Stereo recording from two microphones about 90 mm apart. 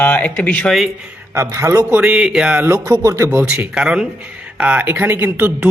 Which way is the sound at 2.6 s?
30° right (ahead or behind).